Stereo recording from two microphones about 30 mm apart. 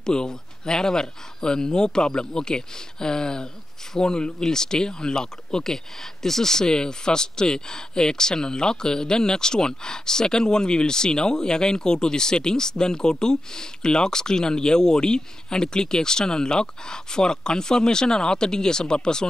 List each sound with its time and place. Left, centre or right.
0.0 s speech: left